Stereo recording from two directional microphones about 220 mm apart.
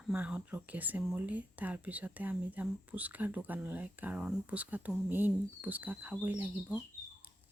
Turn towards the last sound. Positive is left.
turn(degrees=-5)  # may be behind; listen again after turning